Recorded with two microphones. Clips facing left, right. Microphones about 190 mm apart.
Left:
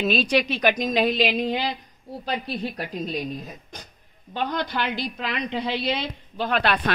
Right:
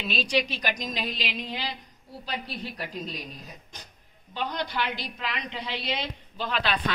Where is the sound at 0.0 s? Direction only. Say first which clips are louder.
Left 6 dB; 50° left (ahead or behind).